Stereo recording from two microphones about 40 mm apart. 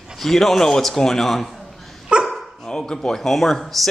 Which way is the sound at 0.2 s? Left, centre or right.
Centre.